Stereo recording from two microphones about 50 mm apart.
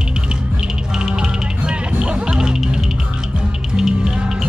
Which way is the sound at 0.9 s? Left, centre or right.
Centre.